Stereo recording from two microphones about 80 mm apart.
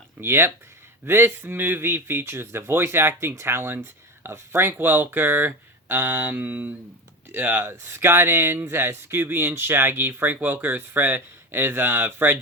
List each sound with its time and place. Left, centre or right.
0.2 s speech: right